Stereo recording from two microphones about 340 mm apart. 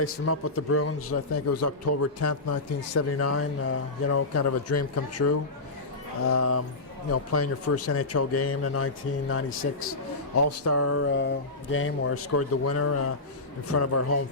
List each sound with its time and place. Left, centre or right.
0.0 s a man's voice: left
10.3 s a man's voice: left